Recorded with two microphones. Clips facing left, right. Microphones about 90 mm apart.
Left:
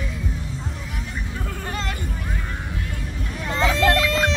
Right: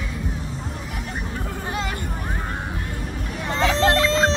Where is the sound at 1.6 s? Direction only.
15° right (ahead or behind).